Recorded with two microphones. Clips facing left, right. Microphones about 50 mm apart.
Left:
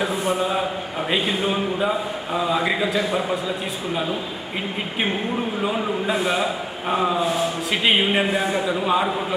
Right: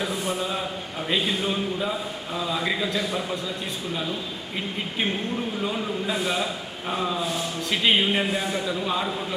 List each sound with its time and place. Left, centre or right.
0.0 s a man's voice: centre
4.9 s a man's voice: centre
7.2 s a man's voice: centre